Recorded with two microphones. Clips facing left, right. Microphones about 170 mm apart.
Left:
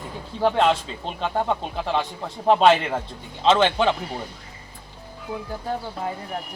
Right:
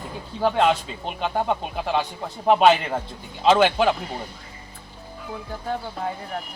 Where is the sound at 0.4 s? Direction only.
Centre (ahead or behind).